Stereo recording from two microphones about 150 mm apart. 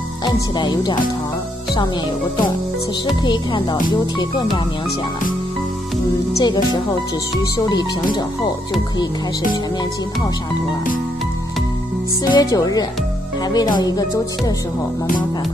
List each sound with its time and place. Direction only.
0.2 s speech: 30° left (ahead or behind)
3.9 s speech: 30° left (ahead or behind)
6.3 s speech: 30° left (ahead or behind)
12.3 s speech: 25° left (ahead or behind)